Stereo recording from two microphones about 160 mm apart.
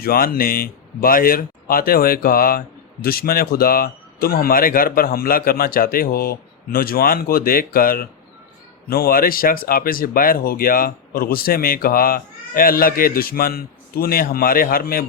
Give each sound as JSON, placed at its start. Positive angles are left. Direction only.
{"t": 0.0, "sound": "speech", "side_deg": 65}